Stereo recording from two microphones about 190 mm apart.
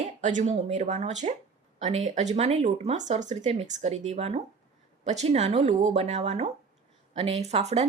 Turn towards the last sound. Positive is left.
turn(degrees=-35)  # may be behind; listen again after turning